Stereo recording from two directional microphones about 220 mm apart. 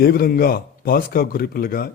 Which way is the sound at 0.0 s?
45° left (ahead or behind).